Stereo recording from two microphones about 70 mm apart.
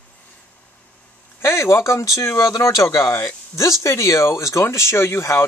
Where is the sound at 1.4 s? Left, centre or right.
Left.